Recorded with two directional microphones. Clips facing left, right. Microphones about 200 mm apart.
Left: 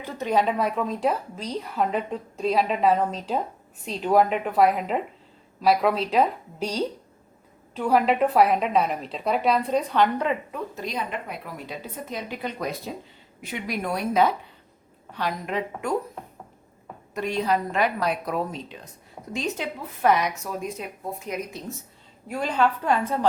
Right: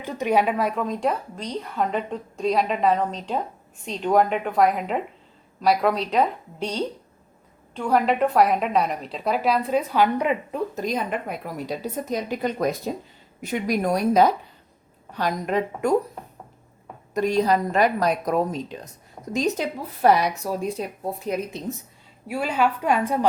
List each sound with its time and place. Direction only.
0.0 s a woman's voice: 15° right (ahead or behind)
0.5 s a woman's voice: centre (ahead or behind)
10.5 s a woman's voice: 45° right (ahead or behind)
17.2 s speech: 40° right (ahead or behind)
22.3 s a woman's voice: 10° right (ahead or behind)